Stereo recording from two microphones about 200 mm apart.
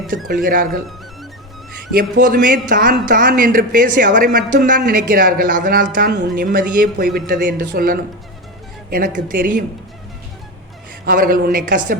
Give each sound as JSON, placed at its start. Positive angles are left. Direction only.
{"t": 0.4, "sound": "a man's voice", "side_deg": -45}
{"t": 2.0, "sound": "a man's voice", "side_deg": -45}
{"t": 11.0, "sound": "a man's voice", "side_deg": -45}